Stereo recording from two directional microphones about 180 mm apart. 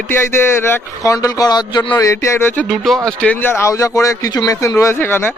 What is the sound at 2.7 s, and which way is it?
Speech, centre (ahead or behind).